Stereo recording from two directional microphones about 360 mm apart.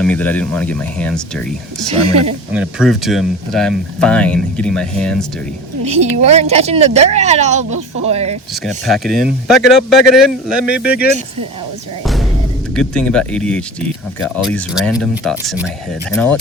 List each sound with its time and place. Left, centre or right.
0.0 s speech: centre
5.8 s speech: centre
8.6 s speech: centre
12.0 s music: centre
12.7 s speech: centre